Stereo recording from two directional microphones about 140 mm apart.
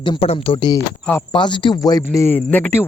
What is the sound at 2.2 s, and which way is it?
Speech, 15° left (ahead or behind).